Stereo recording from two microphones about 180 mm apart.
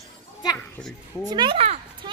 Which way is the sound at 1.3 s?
25° right (ahead or behind).